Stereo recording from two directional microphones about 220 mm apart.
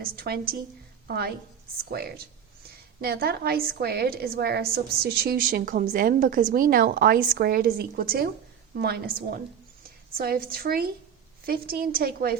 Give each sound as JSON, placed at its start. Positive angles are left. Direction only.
{"t": 0.0, "sound": "a woman's voice", "side_deg": -40}